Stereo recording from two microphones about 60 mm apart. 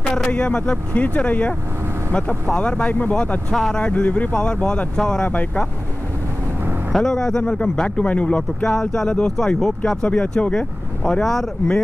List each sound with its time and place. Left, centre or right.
0.3 s speech: centre
2.9 s speech: left
3.5 s speech: centre
3.9 s speech: left
6.9 s speech: centre